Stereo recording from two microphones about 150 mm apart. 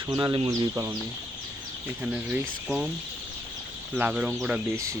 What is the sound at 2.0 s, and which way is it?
Speech, 10° right (ahead or behind).